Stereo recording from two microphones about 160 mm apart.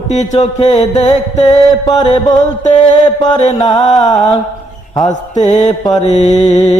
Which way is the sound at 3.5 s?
35° left (ahead or behind).